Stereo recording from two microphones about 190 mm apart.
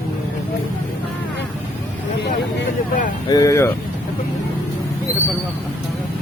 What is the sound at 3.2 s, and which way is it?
Speech, 20° left (ahead or behind).